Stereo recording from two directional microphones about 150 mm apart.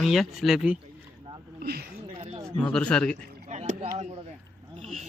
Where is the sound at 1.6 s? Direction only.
90° right.